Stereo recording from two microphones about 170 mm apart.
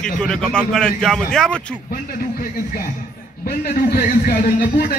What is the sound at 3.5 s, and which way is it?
Speech, 65° left (ahead or behind).